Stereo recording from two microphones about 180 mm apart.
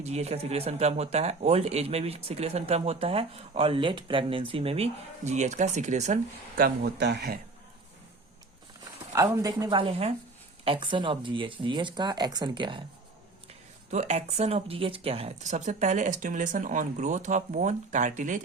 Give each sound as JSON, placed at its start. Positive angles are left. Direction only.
{"t": 0.0, "sound": "speech", "side_deg": -35}
{"t": 6.6, "sound": "speech", "side_deg": -55}
{"t": 9.1, "sound": "speech", "side_deg": -20}
{"t": 13.9, "sound": "speech", "side_deg": -40}